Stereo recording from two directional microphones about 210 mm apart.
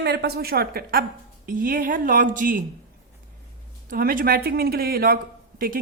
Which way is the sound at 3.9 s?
45° right (ahead or behind).